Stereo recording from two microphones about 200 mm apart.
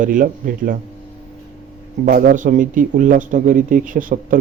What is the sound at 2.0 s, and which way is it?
Speech, 45° right (ahead or behind).